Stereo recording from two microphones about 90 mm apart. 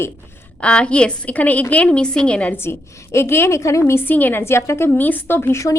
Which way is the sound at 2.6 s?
30° left (ahead or behind).